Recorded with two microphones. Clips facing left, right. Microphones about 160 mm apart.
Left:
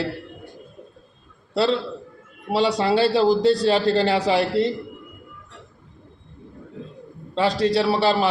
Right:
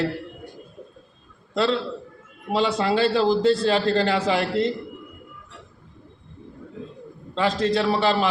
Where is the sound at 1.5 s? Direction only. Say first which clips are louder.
Left 2 dB; 35° left (ahead or behind).